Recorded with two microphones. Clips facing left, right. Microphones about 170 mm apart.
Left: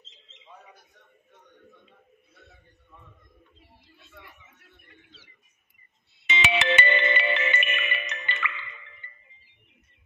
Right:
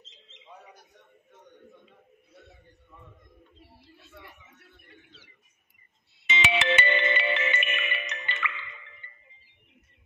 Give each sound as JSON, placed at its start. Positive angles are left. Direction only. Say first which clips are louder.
{"t": 6.2, "sound": "music", "louder": "left 1 dB", "side_deg": 60}